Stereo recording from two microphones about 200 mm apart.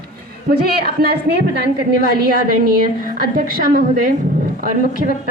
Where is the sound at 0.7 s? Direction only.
50° right (ahead or behind).